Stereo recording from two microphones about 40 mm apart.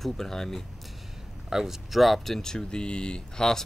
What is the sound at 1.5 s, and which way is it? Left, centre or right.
Speech, centre.